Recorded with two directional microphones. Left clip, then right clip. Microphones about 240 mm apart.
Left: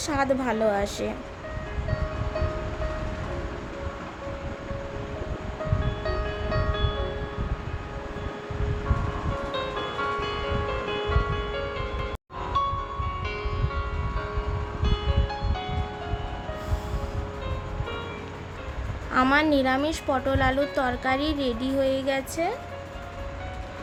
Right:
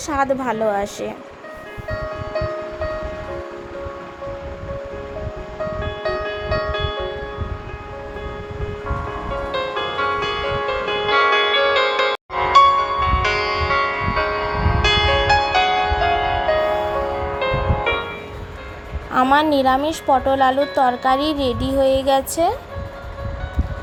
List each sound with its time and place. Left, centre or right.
0.1 s a woman's voice: centre
6.0 s music: right
9.5 s music: right
19.1 s a woman's voice: centre